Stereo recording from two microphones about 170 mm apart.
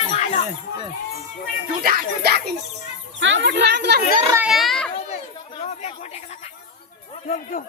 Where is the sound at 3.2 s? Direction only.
90° right.